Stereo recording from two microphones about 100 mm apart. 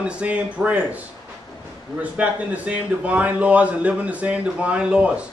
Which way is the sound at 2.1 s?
15° right (ahead or behind).